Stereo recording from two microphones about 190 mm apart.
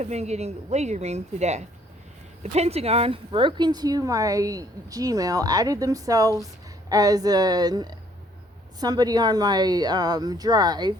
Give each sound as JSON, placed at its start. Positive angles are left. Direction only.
{"t": 0.0, "sound": "a woman's voice", "side_deg": -35}